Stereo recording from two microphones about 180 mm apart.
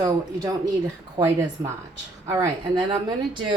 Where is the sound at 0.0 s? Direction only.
20° right (ahead or behind).